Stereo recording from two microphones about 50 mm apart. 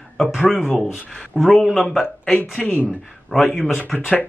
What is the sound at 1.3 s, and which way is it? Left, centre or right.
Speech, centre.